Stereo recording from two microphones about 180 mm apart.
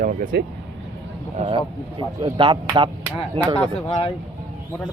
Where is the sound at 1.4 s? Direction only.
30° right (ahead or behind).